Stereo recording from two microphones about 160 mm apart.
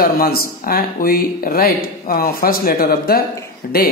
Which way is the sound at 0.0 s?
70° left (ahead or behind).